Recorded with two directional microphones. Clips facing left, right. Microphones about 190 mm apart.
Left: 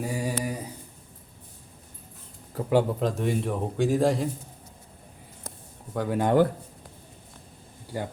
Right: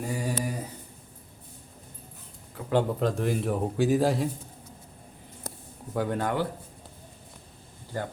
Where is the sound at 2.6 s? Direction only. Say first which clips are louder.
Left 8 dB; 40° left (ahead or behind).